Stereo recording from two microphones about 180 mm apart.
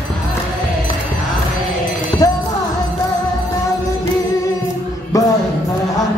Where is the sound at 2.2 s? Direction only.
20° left (ahead or behind).